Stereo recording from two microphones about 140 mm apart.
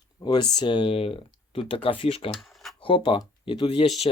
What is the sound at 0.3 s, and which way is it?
Speech, 30° left (ahead or behind).